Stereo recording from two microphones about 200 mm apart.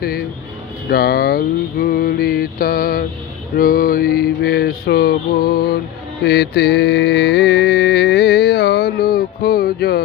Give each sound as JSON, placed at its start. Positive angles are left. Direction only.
{"t": 0.0, "sound": "music", "side_deg": 50}
{"t": 0.9, "sound": "a sound", "side_deg": 50}
{"t": 6.2, "sound": "mantra", "side_deg": 55}